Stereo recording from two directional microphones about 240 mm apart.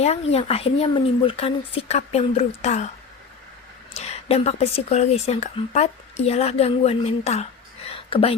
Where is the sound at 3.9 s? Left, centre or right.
Left.